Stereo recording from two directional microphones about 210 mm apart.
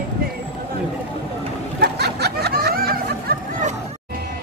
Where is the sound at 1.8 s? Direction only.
50° right (ahead or behind).